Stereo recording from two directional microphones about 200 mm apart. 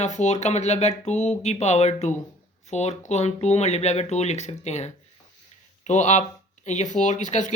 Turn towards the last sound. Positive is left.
turn(degrees=35)  # may be behind; listen again after turning